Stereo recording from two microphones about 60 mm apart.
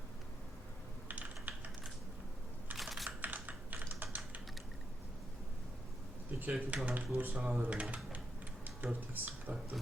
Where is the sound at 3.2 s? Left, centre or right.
Right.